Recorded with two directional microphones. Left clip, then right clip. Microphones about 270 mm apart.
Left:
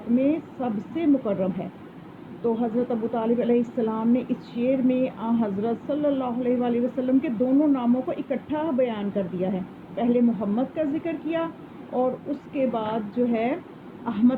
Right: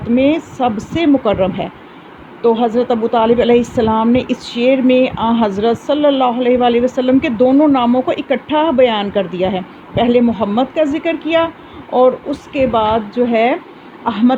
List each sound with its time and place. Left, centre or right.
0.2 s a woman's voice: right